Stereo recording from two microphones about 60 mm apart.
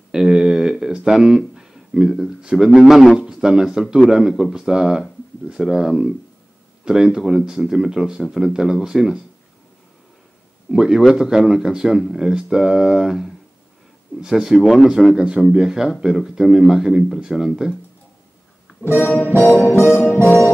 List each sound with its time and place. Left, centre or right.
0.1 s a sound: centre
2.0 s a man's voice: centre
2.9 s a man's voice: centre
10.7 s a man's voice: centre
19.0 s music: left
19.6 s music: left
19.9 s music: left